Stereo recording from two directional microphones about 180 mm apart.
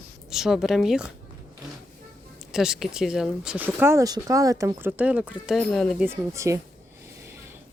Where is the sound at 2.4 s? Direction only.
5° right (ahead or behind).